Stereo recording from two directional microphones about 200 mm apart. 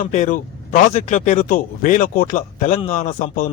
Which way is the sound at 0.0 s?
40° left (ahead or behind).